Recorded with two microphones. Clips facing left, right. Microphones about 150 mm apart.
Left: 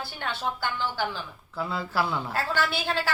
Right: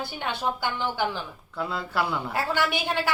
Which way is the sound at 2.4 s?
15° right (ahead or behind).